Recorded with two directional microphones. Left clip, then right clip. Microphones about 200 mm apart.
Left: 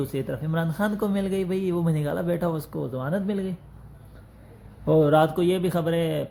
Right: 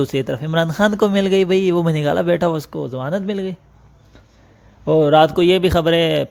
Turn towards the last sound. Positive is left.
turn(degrees=-45)  # may be behind; listen again after turning